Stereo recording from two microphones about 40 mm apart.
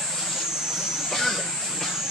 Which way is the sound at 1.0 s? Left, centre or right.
Centre.